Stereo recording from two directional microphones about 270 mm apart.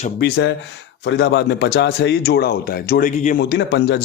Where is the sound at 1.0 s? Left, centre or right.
Left.